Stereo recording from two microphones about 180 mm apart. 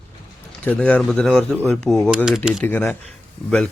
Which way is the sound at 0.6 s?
5° left (ahead or behind).